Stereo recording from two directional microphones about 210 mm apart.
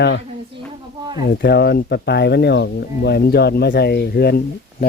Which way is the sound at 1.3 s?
50° left (ahead or behind).